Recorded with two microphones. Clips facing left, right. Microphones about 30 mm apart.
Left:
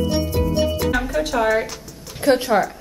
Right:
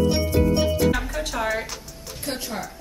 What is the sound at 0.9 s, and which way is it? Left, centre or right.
Music, centre.